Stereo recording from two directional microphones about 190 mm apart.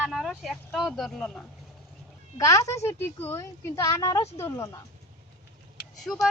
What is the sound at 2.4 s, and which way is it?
A woman's voice, 15° left (ahead or behind).